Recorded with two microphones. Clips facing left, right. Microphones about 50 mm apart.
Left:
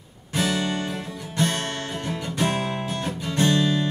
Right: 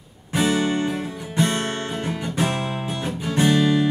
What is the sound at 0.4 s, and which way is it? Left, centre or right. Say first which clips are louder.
Music: right 4 dB; right.